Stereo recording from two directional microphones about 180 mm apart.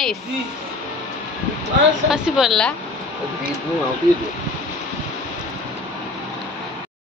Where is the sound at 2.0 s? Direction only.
5° right (ahead or behind).